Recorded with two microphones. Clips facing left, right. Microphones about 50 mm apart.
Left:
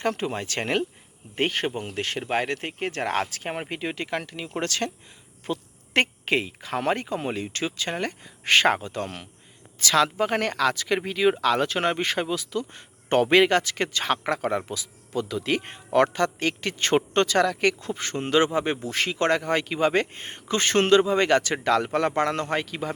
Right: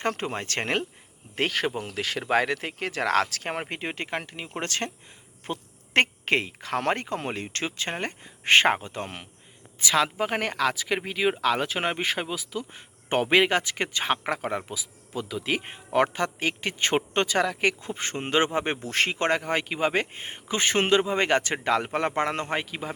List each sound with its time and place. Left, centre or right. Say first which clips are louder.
0.0 s speech: left 2 dB; right
1.4 s speech: left 1 dB; right
2.8 s speech: right 2 dB; right
3.8 s speech: left 2 dB; right
5.5 s speech: left 3 dB; right
9.8 s speech: left 2 dB; centre; by 19.2 s right
19.4 s a man's voice: left 3 dB; centre